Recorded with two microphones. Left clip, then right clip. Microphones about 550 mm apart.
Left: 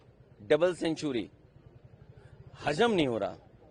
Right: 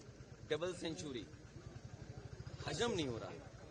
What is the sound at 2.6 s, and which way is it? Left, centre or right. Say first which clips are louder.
Speech: left 13 dB; left.